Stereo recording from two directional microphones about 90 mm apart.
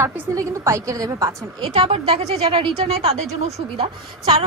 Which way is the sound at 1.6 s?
90° right.